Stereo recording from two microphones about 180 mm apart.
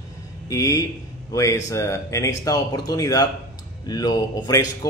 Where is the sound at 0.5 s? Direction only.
20° left (ahead or behind).